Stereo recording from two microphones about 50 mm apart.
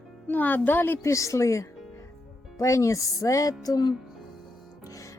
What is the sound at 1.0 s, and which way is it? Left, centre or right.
Speech, left.